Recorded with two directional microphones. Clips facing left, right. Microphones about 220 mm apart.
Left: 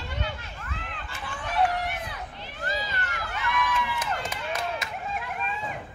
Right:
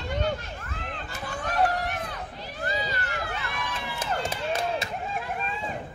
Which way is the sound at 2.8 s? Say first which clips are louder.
Right 3 dB; 35° right (ahead or behind).